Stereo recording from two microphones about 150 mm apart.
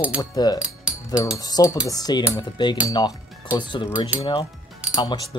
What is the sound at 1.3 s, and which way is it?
Speech, 25° left (ahead or behind).